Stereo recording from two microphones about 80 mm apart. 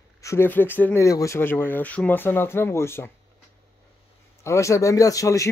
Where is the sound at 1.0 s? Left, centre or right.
Left.